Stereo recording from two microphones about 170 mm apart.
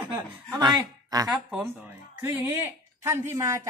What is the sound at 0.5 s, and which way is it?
Speech, 25° right (ahead or behind).